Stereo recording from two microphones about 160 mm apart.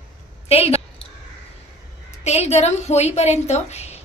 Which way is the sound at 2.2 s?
45° left (ahead or behind).